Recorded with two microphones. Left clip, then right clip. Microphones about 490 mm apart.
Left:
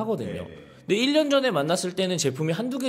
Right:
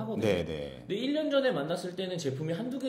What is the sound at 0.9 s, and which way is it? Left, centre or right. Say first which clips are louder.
Speech: left 9 dB; left.